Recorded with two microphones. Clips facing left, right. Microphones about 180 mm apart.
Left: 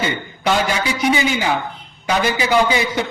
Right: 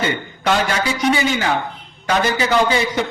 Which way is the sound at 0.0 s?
10° left (ahead or behind).